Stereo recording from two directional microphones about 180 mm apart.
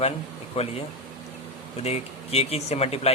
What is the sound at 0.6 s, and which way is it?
Speech, 35° left (ahead or behind).